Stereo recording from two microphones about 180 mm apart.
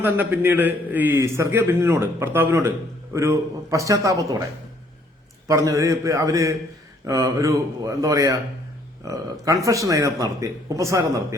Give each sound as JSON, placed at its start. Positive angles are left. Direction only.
{"t": 0.0, "sound": "a man's voice", "side_deg": -10}
{"t": 5.5, "sound": "a man's voice", "side_deg": -15}